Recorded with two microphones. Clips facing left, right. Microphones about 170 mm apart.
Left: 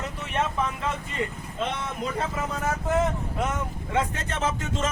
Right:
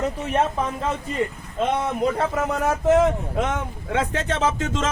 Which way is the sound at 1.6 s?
65° right (ahead or behind).